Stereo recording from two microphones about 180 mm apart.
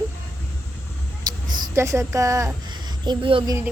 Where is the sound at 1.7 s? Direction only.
15° right (ahead or behind).